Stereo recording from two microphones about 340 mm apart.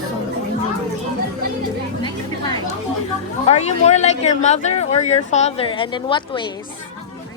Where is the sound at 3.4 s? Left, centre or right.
Centre.